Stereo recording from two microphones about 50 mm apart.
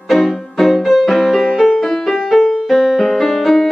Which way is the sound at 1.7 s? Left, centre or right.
Centre.